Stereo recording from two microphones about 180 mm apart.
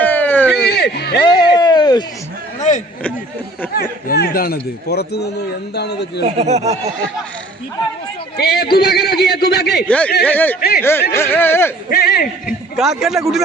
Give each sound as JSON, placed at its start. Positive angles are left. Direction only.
{"t": 0.0, "sound": "a sound", "side_deg": 10}
{"t": 0.6, "sound": "a sound", "side_deg": 65}
{"t": 1.2, "sound": "a sound", "side_deg": 25}
{"t": 2.6, "sound": "a sound", "side_deg": 40}
{"t": 3.7, "sound": "a man's voice", "side_deg": 60}
{"t": 6.2, "sound": "speech", "side_deg": -35}
{"t": 8.4, "sound": "a man's voice", "side_deg": 60}
{"t": 9.8, "sound": "speech", "side_deg": 5}
{"t": 10.6, "sound": "a man's voice", "side_deg": 60}
{"t": 11.1, "sound": "speech", "side_deg": 10}
{"t": 11.9, "sound": "a man's voice", "side_deg": 55}
{"t": 12.7, "sound": "a man's voice", "side_deg": 0}